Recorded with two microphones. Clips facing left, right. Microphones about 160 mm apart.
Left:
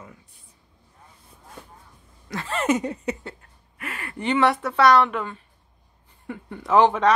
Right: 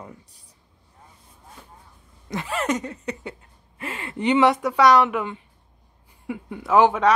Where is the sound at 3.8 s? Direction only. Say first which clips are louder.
Right 4 dB; 25° right (ahead or behind).